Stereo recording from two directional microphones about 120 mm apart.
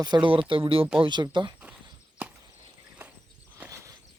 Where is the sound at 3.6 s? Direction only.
25° right (ahead or behind).